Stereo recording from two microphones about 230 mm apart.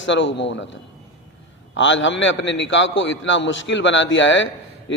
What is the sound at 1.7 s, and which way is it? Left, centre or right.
A man's voice, left.